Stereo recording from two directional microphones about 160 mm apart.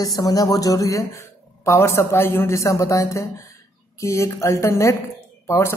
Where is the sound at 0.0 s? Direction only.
20° left (ahead or behind).